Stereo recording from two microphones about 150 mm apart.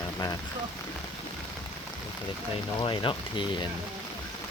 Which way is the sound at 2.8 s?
35° left (ahead or behind).